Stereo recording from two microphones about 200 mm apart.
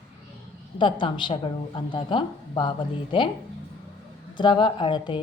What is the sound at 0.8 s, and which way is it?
A woman's voice, 25° left (ahead or behind).